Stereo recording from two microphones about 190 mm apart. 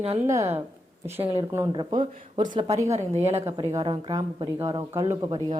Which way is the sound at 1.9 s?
40° right (ahead or behind).